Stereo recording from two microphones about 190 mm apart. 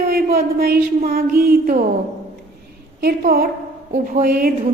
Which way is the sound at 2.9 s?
50° right (ahead or behind).